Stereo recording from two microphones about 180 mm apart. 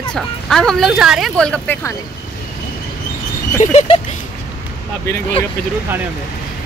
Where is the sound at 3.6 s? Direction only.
40° left (ahead or behind).